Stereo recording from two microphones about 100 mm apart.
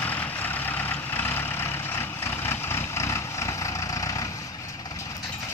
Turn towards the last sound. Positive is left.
turn(degrees=35)  # may be behind; listen again after turning